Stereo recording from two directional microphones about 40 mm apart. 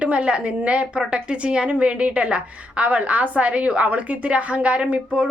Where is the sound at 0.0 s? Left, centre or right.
Right.